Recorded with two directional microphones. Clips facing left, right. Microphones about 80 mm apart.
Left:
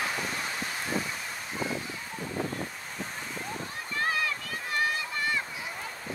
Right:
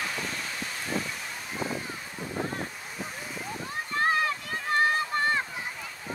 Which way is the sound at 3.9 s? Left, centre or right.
Right.